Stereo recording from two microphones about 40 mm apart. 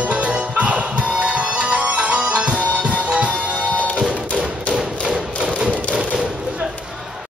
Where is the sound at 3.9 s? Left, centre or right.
Right.